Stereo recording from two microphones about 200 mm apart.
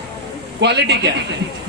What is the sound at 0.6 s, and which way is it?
Speech, 60° right (ahead or behind).